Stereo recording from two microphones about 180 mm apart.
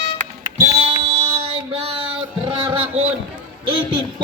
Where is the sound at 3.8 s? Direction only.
30° right (ahead or behind).